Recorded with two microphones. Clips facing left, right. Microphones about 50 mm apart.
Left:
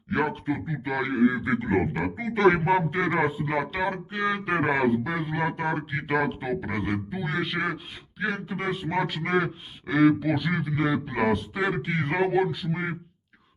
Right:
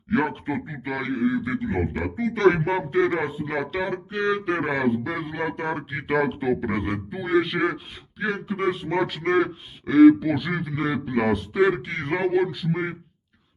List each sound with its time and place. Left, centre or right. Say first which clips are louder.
0.1 s speech: right 2 dB; centre
1.1 s a man's voice: left 1 dB; left
1.8 s a man's voice: right 1 dB; centre
2.1 s a man's voice: right 2 dB; left
2.6 s a man's voice: right 1 dB; centre
3.2 s a man's voice: left 1 dB; centre
3.9 s a man's voice: right 3 dB; centre